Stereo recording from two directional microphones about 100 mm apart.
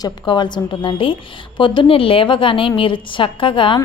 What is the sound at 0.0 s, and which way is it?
A woman's voice, 50° left (ahead or behind).